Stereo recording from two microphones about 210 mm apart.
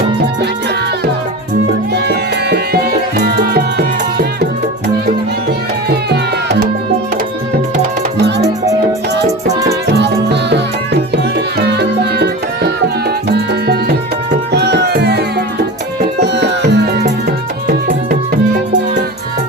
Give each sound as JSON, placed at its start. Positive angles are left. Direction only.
{"t": 1.9, "sound": "music", "side_deg": -50}
{"t": 5.9, "sound": "music", "side_deg": -50}
{"t": 9.5, "sound": "music", "side_deg": -15}
{"t": 9.9, "sound": "music", "side_deg": -55}
{"t": 16.2, "sound": "music", "side_deg": -55}